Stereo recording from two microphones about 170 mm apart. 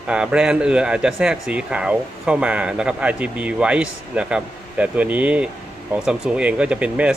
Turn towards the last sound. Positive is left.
turn(degrees=-5)  # may be behind; listen again after turning